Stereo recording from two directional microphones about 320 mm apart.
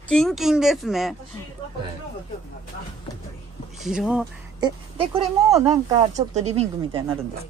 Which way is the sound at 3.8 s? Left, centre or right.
Centre.